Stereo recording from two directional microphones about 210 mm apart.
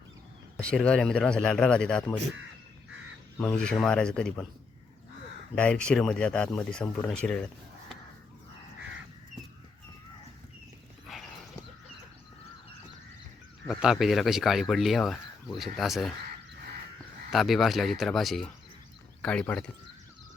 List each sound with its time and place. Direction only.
0.5 s speech: 5° left (ahead or behind)
3.3 s speech: 5° left (ahead or behind)
5.5 s speech: 5° left (ahead or behind)
13.8 s speech: centre (ahead or behind)
17.3 s speech: centre (ahead or behind)